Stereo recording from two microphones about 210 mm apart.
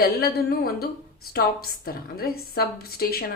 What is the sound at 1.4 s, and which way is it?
Speech, 50° left (ahead or behind).